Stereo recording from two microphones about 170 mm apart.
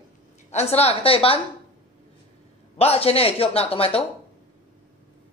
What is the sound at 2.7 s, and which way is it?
A woman's voice, 35° left (ahead or behind).